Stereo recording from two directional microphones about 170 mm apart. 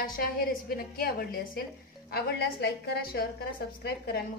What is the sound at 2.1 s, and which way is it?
A woman's voice, 75° left (ahead or behind).